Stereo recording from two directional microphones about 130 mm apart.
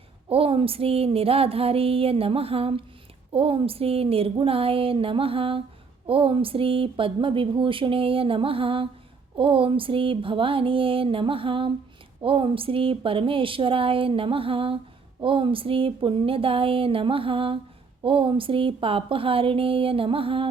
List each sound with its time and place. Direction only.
0.3 s speech: 45° right (ahead or behind)